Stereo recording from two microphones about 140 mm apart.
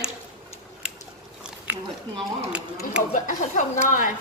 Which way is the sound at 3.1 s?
65° left (ahead or behind).